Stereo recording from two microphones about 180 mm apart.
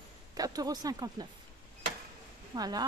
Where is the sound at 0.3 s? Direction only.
20° right (ahead or behind).